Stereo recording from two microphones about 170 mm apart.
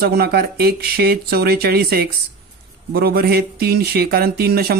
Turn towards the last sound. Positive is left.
turn(degrees=-65)  # may be behind; listen again after turning